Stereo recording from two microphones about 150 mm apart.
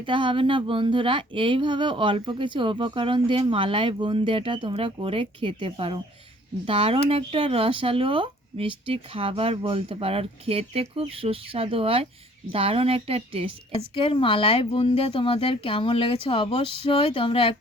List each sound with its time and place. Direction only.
0.0 s speech: 35° right (ahead or behind)
13.9 s speech: 35° left (ahead or behind)